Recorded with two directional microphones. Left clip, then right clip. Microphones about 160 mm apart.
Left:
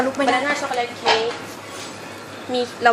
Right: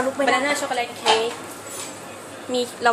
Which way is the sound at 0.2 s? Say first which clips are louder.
Even; 25° left (ahead or behind).